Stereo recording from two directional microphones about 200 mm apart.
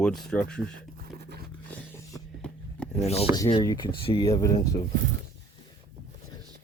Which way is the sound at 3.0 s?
30° left (ahead or behind).